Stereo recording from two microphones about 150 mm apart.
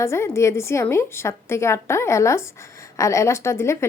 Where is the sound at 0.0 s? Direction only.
15° left (ahead or behind).